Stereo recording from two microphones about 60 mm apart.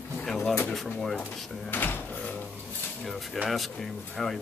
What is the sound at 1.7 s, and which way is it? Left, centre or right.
Cupboard open or close, left.